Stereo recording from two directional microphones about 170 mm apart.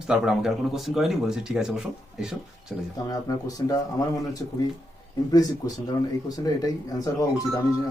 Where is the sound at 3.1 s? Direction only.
20° left (ahead or behind).